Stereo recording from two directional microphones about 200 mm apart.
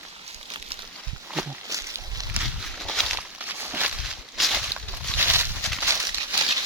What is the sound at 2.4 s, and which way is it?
Walk, centre (ahead or behind).